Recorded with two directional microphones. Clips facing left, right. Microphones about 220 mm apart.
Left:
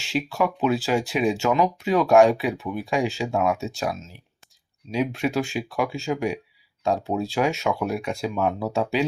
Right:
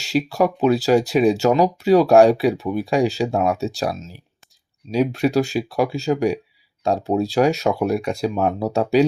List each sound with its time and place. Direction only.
0.0 s speech: 40° right (ahead or behind)